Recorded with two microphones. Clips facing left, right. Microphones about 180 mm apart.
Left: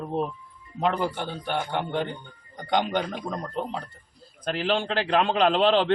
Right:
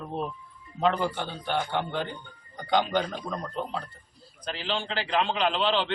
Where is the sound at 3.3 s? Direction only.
25° left (ahead or behind).